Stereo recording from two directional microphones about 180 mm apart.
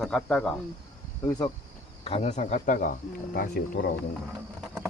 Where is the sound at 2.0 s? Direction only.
35° left (ahead or behind); by 3.8 s 55° left (ahead or behind).